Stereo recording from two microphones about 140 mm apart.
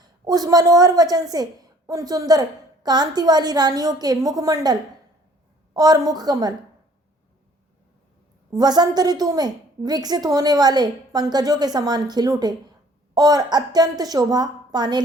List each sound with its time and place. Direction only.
0.3 s a woman's voice: 25° right (ahead or behind)
8.5 s a woman's voice: 30° right (ahead or behind)